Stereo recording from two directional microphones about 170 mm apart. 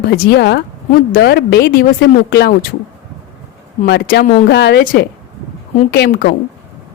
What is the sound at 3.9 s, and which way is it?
Speech, 75° left (ahead or behind).